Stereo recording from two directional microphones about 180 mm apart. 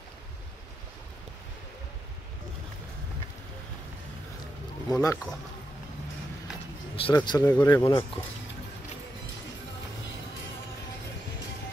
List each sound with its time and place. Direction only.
4.8 s speech: 20° left (ahead or behind)
7.0 s speech: 25° left (ahead or behind)